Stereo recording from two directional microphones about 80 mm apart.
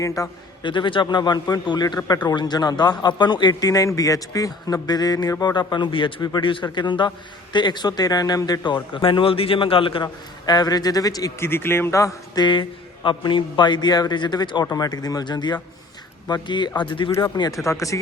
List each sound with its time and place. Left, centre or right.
0.2 s a man's voice: left
0.6 s a man's voice: left
11.3 s speech: left
12.4 s a man's voice: left
14.6 s a man's voice: left
17.4 s a man's voice: left
17.7 s speech: left